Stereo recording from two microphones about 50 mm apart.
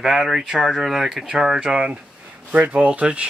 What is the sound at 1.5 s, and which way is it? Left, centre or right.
Speech, right.